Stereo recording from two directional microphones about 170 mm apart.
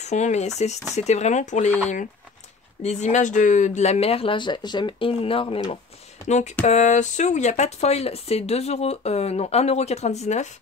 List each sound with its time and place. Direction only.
0.0 s speech: 40° left (ahead or behind)
2.8 s speech: 45° left (ahead or behind)
6.2 s speech: 45° left (ahead or behind)